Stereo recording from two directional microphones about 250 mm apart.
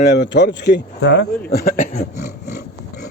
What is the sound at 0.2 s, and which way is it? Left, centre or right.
Speech, left.